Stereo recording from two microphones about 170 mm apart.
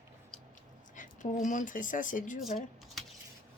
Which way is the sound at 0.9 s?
50° left (ahead or behind).